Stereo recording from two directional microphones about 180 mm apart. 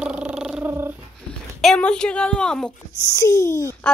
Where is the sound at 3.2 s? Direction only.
15° left (ahead or behind).